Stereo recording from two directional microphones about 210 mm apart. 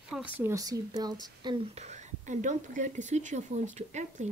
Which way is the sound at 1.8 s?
35° right (ahead or behind).